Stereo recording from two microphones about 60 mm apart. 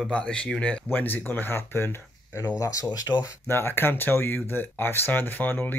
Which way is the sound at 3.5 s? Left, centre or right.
Left.